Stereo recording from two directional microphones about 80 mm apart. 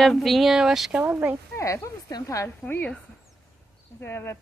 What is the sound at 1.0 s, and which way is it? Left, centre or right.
Speech, right.